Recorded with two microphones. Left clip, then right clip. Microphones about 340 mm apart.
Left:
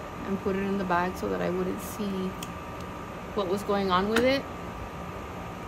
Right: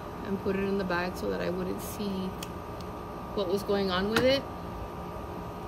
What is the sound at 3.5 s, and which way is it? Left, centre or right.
Speech, left.